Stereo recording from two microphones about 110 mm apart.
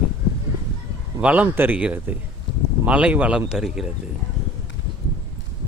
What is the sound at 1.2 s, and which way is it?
Speech, 10° right (ahead or behind).